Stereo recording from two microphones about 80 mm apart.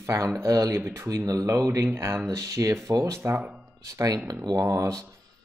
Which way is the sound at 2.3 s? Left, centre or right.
Right.